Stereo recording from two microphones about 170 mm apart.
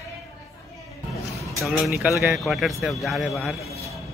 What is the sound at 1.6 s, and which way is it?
A man's voice, centre (ahead or behind).